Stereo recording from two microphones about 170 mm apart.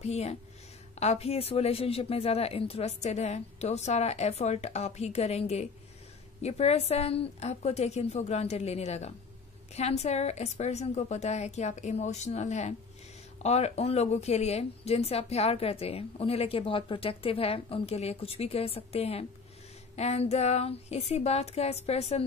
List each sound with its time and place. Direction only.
0.0 s a woman's voice: 40° left (ahead or behind)